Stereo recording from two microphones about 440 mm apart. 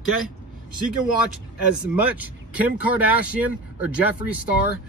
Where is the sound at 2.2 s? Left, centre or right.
Centre.